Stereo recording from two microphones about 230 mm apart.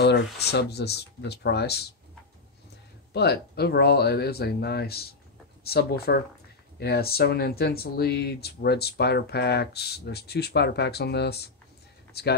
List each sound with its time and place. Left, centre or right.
0.0 s speech: left
3.1 s speech: left